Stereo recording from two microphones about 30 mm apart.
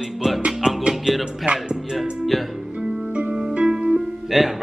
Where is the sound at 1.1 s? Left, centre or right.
Centre.